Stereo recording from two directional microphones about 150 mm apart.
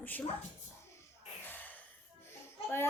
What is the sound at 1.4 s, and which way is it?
Gasp, 10° left (ahead or behind).